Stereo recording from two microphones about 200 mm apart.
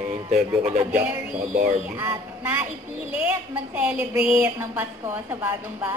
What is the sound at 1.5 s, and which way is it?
Speech, 40° right (ahead or behind).